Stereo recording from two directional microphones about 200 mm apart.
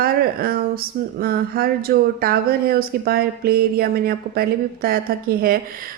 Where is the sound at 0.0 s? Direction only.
50° right (ahead or behind).